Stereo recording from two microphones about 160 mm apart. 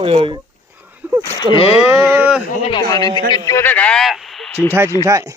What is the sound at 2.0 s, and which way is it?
Speech, 15° right (ahead or behind).